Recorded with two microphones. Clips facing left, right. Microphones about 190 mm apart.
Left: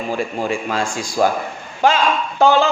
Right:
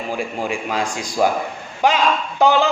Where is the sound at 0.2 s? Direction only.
15° right (ahead or behind).